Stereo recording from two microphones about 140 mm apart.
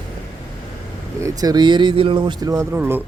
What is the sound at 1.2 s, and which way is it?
Speech, 25° right (ahead or behind).